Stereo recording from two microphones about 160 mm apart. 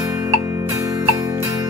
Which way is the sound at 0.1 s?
20° right (ahead or behind).